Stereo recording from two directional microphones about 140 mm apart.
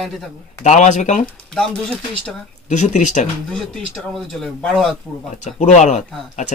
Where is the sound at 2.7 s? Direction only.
60° left (ahead or behind).